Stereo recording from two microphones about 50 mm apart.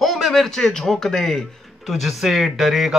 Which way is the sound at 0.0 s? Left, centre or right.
Centre.